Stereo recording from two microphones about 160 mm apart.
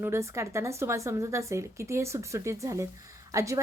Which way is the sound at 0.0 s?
15° right (ahead or behind).